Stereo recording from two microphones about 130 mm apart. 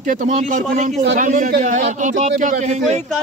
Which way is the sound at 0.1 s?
80° right.